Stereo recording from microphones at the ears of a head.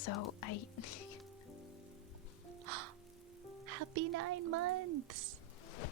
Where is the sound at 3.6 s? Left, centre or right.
Right.